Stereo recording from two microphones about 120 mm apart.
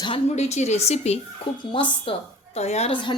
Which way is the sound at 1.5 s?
45° left (ahead or behind).